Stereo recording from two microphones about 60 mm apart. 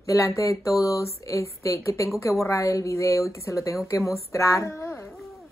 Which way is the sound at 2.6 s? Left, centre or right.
Left.